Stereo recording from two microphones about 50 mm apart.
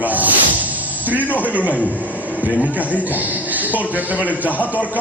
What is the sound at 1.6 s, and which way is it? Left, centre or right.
Speech, left.